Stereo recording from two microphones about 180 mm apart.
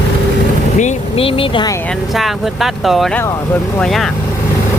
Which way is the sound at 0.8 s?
30° left (ahead or behind).